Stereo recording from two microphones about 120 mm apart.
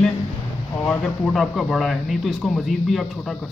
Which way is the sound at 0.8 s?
5° left (ahead or behind).